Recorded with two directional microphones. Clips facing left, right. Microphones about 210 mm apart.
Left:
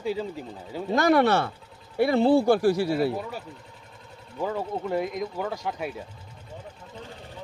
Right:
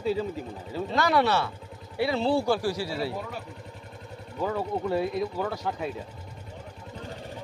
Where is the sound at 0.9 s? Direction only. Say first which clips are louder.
Left 4 dB; 50° left (ahead or behind).